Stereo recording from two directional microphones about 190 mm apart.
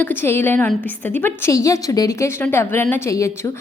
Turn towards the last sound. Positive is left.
turn(degrees=15)  # may be behind; listen again after turning